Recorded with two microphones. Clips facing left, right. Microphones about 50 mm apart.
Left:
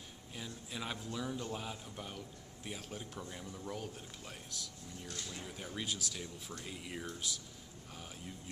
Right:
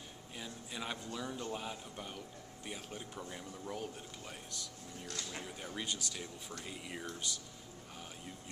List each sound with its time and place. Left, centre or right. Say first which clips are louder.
0.4 s a man's voice: even; centre